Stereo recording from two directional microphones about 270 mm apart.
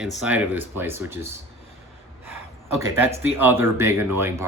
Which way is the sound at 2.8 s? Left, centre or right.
Centre.